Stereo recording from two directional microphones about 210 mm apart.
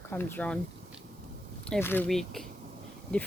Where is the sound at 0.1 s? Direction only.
10° left (ahead or behind).